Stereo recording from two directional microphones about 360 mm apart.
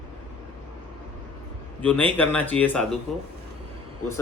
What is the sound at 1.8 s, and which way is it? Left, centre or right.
Speech, centre.